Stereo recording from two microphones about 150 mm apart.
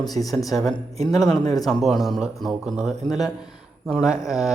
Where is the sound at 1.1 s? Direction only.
25° left (ahead or behind).